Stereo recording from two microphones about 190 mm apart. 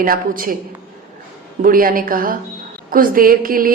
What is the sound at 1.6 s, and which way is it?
A woman's voice, 50° right (ahead or behind).